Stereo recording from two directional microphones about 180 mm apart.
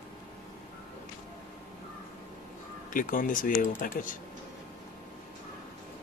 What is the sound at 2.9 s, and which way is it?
Speech, 50° left (ahead or behind).